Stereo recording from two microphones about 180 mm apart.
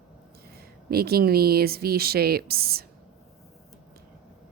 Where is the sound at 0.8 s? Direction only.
60° right (ahead or behind).